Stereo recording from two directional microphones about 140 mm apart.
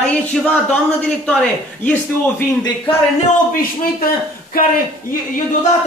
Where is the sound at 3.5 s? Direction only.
90° left.